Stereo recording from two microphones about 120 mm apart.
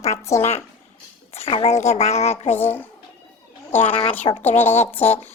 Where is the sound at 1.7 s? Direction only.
65° left (ahead or behind).